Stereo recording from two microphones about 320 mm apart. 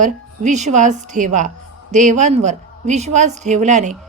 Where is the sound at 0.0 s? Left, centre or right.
Right.